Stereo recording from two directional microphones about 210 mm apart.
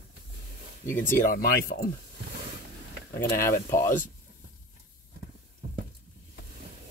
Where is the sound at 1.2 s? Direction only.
45° left (ahead or behind).